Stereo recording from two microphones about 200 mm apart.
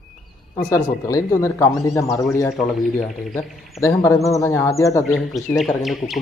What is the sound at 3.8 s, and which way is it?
Speech, 15° left (ahead or behind).